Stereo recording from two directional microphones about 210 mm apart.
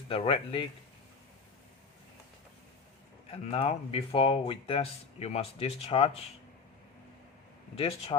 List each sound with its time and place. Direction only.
0.1 s speech: 25° left (ahead or behind)
3.2 s speech: 30° left (ahead or behind)
7.8 s speech: 25° left (ahead or behind)